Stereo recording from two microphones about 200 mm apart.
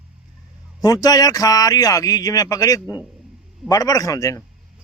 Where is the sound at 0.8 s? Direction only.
20° left (ahead or behind).